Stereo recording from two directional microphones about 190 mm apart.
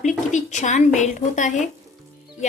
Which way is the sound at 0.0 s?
40° left (ahead or behind).